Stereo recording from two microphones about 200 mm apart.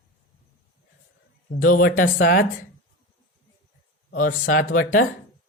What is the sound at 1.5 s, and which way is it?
Speech, 45° left (ahead or behind).